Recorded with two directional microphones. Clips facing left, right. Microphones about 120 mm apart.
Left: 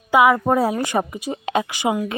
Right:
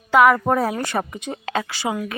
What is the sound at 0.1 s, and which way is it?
Speech, 10° left (ahead or behind).